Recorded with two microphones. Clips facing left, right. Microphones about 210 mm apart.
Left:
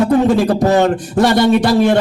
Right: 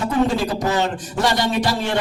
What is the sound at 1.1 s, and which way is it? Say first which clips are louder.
Speech: left 8 dB; 50° left (ahead or behind).